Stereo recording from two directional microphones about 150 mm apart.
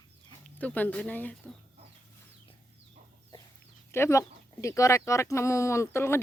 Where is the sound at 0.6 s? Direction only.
10° left (ahead or behind).